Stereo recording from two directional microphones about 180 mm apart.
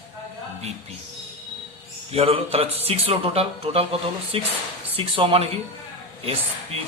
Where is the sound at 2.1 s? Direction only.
35° right (ahead or behind).